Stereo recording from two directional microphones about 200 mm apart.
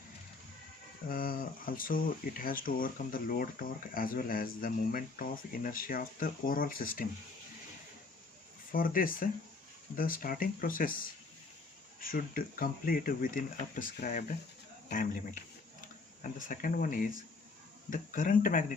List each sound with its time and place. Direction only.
1.0 s speech: 45° left (ahead or behind)
8.7 s speech: 45° left (ahead or behind)
16.5 s speech: 45° left (ahead or behind)